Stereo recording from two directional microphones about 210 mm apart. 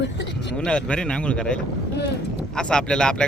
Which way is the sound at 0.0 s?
55° left (ahead or behind).